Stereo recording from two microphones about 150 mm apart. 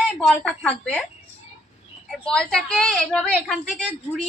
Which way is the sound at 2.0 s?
5° left (ahead or behind).